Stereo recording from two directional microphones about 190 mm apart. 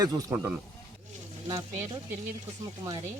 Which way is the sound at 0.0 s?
15° right (ahead or behind).